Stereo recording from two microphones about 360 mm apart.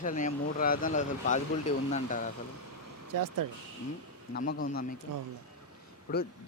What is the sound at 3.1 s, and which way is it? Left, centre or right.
Speech, right.